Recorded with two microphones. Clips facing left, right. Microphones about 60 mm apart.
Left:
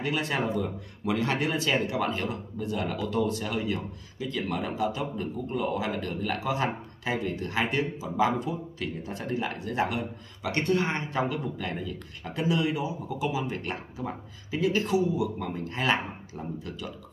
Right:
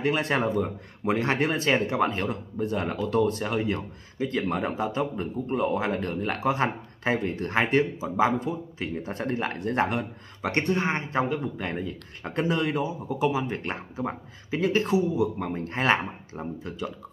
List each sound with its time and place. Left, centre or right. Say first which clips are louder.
0.0 s speech: right 4 dB; right
10.6 s speech: even; right